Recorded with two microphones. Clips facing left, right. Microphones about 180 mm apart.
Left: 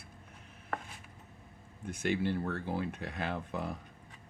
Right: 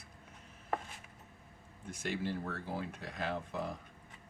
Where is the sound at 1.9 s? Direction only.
60° left (ahead or behind).